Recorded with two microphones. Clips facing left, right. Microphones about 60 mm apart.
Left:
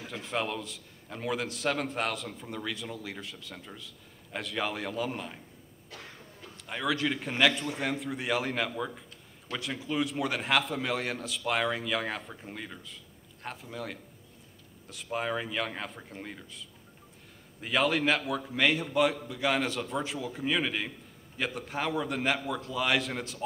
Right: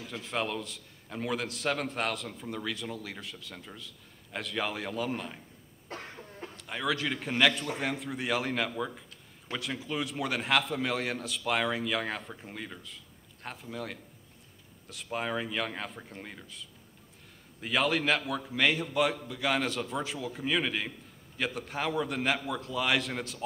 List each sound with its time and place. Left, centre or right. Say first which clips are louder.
0.2 s a man's voice: even; centre
5.9 s cough: right 5 dB; right
6.5 s a man's voice: left 1 dB; centre